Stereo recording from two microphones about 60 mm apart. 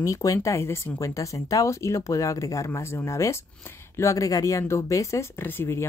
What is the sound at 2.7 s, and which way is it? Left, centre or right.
Speech, left.